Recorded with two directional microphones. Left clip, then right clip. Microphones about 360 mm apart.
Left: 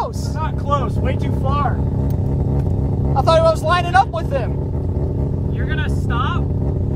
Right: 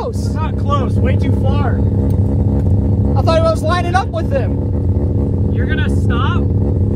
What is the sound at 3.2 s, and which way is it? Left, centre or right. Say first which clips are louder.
Vehicle: even; centre.